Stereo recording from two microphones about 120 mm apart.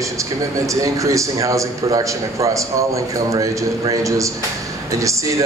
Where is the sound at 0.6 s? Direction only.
25° right (ahead or behind).